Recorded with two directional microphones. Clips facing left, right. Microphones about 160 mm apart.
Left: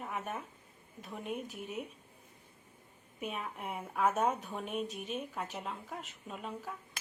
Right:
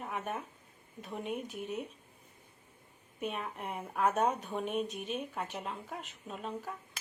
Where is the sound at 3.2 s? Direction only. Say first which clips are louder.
Right 2 dB; centre (ahead or behind).